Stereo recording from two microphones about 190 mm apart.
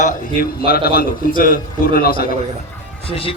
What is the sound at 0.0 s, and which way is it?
A man's voice, 45° left (ahead or behind).